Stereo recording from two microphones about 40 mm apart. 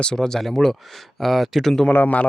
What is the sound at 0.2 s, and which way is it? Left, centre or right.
Speech, centre.